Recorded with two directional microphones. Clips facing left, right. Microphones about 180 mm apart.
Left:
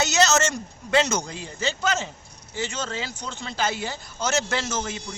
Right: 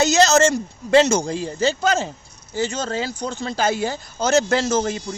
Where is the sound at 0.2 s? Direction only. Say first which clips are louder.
Right 4 dB; 30° right (ahead or behind).